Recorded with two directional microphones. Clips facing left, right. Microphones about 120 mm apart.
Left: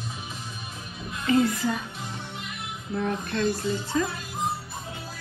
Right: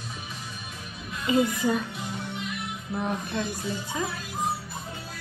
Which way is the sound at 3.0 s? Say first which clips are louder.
Left 3 dB; 15° right (ahead or behind).